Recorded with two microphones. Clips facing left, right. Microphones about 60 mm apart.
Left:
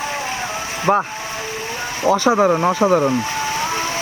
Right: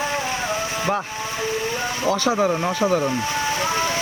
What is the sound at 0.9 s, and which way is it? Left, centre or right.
Speech, left.